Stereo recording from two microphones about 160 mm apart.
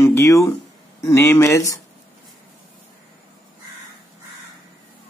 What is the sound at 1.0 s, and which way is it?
Speech, 15° left (ahead or behind).